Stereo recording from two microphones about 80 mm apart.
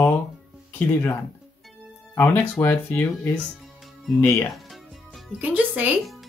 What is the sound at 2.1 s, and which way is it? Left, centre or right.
Speech, left.